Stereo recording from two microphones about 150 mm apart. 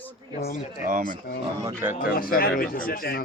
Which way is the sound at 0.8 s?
65° right (ahead or behind).